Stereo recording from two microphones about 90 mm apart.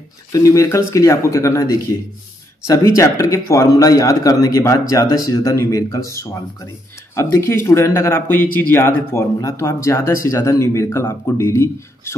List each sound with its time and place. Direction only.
0.3 s speech: 40° left (ahead or behind)